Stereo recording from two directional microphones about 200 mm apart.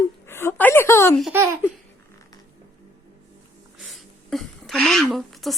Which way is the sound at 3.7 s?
Centre (ahead or behind).